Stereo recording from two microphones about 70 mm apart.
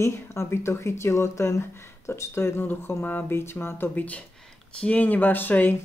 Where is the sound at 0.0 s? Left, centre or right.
Left.